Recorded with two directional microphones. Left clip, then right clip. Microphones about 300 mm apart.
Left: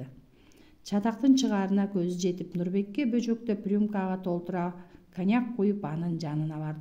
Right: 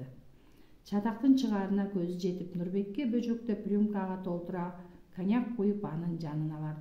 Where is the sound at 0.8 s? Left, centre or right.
Left.